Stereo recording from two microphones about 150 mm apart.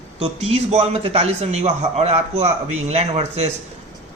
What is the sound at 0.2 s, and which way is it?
A man's voice, 40° right (ahead or behind).